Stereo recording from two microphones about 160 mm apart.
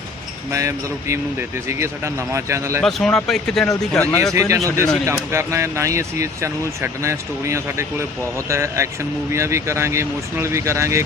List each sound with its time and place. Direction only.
0.5 s speech: 20° right (ahead or behind)
2.8 s speech: 5° left (ahead or behind)
4.4 s speech: 20° right (ahead or behind)